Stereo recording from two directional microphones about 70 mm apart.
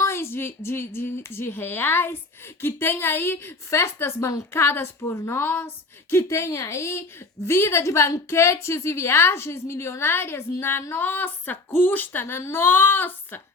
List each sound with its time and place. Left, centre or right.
0.0 s a woman's voice: left